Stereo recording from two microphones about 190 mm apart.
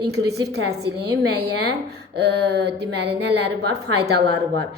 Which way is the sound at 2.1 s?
60° right (ahead or behind).